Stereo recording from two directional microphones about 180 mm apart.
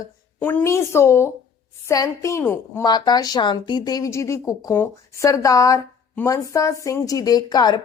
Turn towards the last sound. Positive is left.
turn(degrees=25)  # may be behind; listen again after turning